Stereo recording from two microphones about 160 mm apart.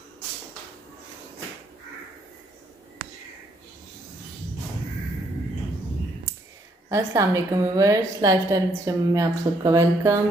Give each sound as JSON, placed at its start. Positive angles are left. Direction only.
{"t": 6.9, "sound": "a woman's voice", "side_deg": -20}